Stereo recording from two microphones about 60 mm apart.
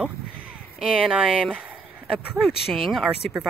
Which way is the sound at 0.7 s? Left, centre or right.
Centre.